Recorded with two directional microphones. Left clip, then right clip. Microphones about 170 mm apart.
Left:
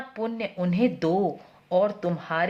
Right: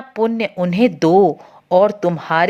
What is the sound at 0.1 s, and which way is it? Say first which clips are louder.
A woman's voice: right 14 dB; 45° right (ahead or behind).